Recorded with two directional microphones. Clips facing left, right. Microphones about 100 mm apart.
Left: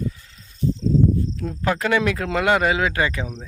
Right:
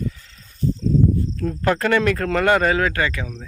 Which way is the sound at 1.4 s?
10° left (ahead or behind).